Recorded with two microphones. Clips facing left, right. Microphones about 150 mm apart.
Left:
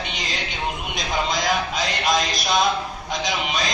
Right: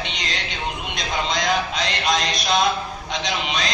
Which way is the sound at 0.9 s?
Centre (ahead or behind).